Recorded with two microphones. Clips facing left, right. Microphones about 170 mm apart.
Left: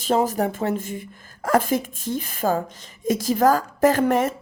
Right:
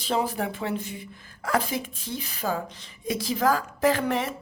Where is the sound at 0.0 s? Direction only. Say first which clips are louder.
Left 6 dB; 45° left (ahead or behind).